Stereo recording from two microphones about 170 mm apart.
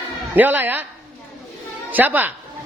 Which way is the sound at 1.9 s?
10° right (ahead or behind).